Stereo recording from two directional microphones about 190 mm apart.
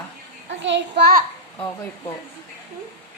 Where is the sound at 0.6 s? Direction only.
65° right (ahead or behind).